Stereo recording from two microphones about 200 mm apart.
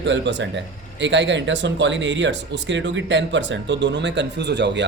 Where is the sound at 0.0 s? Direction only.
60° right (ahead or behind).